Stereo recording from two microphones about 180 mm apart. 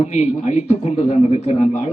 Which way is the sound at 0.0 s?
40° left (ahead or behind).